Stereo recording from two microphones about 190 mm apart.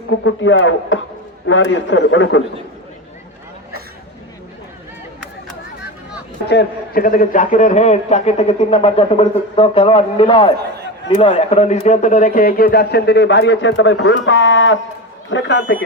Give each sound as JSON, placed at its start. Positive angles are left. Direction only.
{"t": 0.1, "sound": "a man's voice", "side_deg": 85}
{"t": 6.5, "sound": "a man's voice", "side_deg": 55}